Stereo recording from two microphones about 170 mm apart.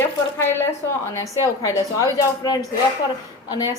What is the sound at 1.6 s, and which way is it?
Speech, 20° left (ahead or behind).